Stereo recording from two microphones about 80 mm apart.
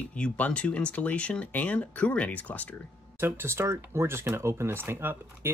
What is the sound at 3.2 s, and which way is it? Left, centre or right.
Speech, right.